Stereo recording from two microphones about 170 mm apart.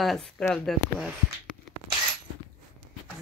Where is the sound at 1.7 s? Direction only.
Centre (ahead or behind).